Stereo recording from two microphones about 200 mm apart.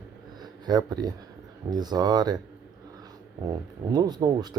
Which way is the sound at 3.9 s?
20° right (ahead or behind).